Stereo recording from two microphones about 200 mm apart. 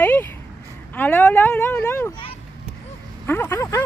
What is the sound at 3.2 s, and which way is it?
Speech, 10° left (ahead or behind).